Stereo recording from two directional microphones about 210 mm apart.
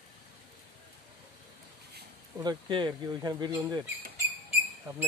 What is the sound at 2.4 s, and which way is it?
Speech, 20° right (ahead or behind).